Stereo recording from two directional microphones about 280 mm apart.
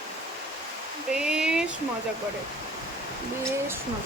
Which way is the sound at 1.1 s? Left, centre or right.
Centre.